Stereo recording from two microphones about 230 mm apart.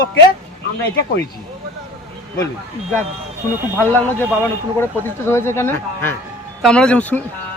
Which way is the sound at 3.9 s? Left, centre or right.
Centre.